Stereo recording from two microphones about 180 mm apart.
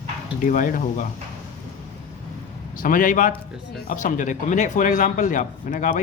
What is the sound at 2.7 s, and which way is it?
A man's voice, 50° left (ahead or behind).